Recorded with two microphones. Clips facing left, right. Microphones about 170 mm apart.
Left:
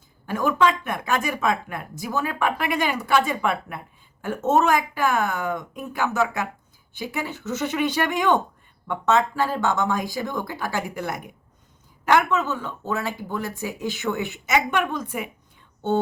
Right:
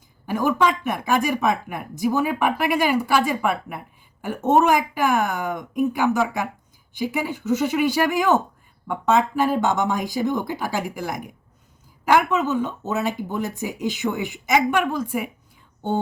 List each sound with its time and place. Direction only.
0.3 s a woman's voice: 10° right (ahead or behind)